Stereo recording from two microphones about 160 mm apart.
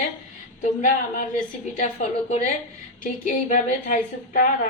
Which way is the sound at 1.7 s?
50° left (ahead or behind).